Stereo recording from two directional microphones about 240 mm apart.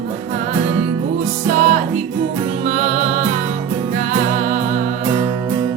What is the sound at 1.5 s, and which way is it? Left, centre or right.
Music, right.